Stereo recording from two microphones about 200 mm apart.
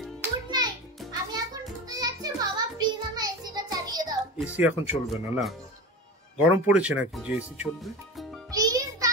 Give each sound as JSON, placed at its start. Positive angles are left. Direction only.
{"t": 0.2, "sound": "music", "side_deg": -20}
{"t": 4.4, "sound": "speech", "side_deg": -5}
{"t": 8.5, "sound": "music", "side_deg": -15}